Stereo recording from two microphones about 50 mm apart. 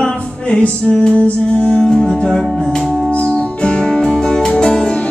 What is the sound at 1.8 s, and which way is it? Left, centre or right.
Music, centre.